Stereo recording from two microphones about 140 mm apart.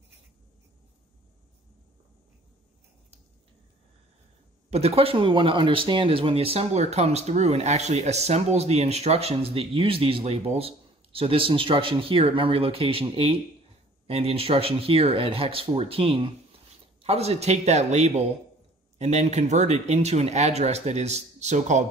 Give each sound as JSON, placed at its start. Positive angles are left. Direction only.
{"t": 4.6, "sound": "speech", "side_deg": -45}